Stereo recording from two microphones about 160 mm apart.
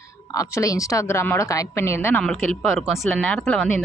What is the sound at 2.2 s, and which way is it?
Speech, centre (ahead or behind).